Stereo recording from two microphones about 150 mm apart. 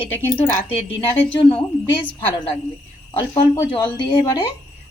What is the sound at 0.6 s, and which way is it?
Speech, 40° left (ahead or behind).